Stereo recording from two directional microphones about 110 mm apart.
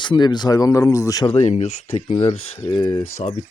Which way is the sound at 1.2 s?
80° left.